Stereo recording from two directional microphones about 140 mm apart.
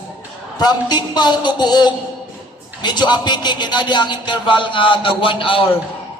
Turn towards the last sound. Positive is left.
turn(degrees=40)  # may be behind; listen again after turning